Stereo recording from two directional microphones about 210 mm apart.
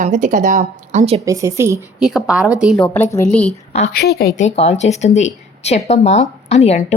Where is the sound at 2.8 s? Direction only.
10° left (ahead or behind).